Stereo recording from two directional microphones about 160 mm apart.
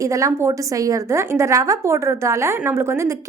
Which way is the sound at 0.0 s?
20° right (ahead or behind).